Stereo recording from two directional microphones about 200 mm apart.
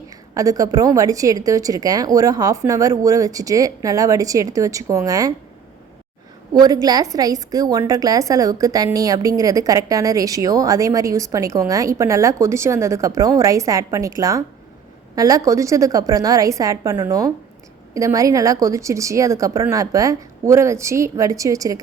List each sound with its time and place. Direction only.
0.3 s a woman's voice: 15° right (ahead or behind)
6.5 s a woman's voice: 20° right (ahead or behind)